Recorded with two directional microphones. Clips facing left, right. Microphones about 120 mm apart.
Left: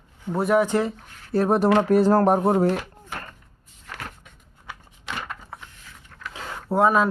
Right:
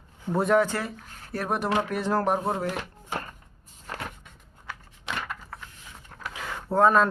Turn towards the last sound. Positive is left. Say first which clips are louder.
# left 1 dB
turn(degrees=10)  # may be behind; listen again after turning